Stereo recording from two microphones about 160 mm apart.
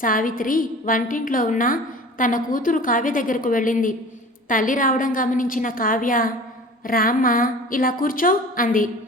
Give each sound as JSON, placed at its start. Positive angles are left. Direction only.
{"t": 0.0, "sound": "a woman's voice", "side_deg": 55}